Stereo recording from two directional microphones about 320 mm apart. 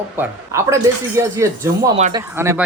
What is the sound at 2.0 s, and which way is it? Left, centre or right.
Speech, right.